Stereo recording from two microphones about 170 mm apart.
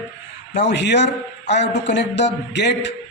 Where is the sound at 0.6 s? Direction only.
90° left.